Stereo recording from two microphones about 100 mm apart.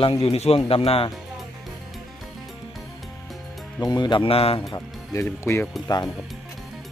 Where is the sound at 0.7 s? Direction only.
70° left (ahead or behind).